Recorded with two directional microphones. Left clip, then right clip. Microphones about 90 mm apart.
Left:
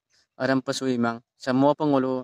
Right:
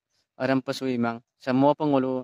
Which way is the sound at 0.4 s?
20° left (ahead or behind).